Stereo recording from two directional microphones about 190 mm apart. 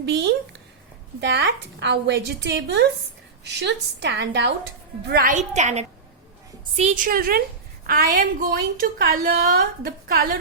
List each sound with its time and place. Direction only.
0.0 s a woman's voice: 65° right (ahead or behind)
5.0 s a woman's voice: 50° right (ahead or behind)